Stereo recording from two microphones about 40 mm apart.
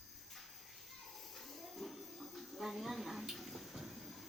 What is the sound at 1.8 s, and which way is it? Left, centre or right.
Music, centre.